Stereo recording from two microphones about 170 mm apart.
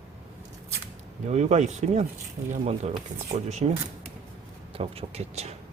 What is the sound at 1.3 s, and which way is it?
Speech, 40° right (ahead or behind).